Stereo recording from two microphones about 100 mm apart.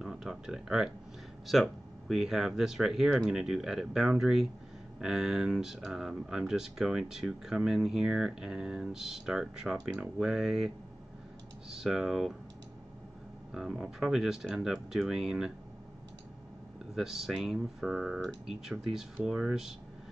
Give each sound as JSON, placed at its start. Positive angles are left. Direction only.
{"t": 0.0, "sound": "speech", "side_deg": -5}
{"t": 11.7, "sound": "speech", "side_deg": -5}
{"t": 13.5, "sound": "speech", "side_deg": -5}
{"t": 16.9, "sound": "speech", "side_deg": -5}